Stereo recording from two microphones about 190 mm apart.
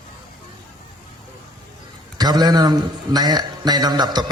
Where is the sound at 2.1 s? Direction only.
20° right (ahead or behind).